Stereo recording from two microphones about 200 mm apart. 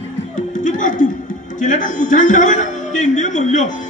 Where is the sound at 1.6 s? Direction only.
40° left (ahead or behind).